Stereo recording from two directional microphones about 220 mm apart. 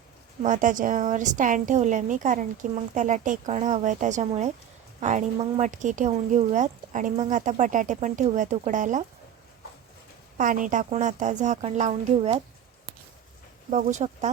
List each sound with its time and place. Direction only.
0.4 s speech: 35° right (ahead or behind)
10.3 s speech: 35° right (ahead or behind)
13.7 s speech: 30° right (ahead or behind)